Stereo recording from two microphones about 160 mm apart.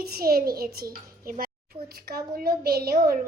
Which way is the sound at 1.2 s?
65° right (ahead or behind).